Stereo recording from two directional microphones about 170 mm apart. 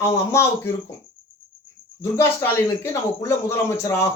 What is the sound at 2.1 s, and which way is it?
Speech, 15° left (ahead or behind).